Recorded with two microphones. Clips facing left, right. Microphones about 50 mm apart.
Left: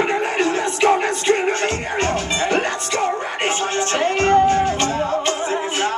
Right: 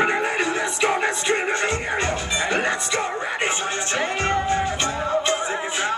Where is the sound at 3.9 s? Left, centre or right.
Left.